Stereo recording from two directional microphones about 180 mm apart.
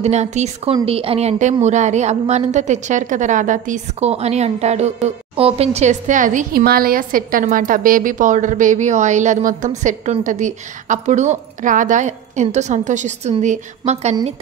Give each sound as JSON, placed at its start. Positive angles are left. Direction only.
{"t": 0.0, "sound": "a woman's voice", "side_deg": -40}